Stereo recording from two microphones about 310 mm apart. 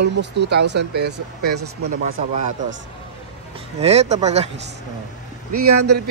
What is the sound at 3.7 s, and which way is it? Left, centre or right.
Speech, centre.